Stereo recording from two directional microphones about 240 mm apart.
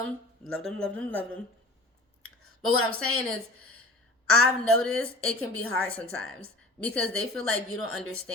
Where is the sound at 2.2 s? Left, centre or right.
Right.